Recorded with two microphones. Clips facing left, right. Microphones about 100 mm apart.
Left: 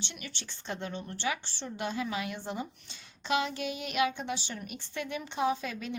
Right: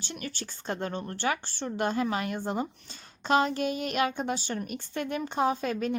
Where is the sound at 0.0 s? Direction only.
40° right (ahead or behind).